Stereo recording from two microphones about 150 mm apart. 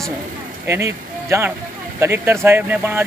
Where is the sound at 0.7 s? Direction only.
20° right (ahead or behind).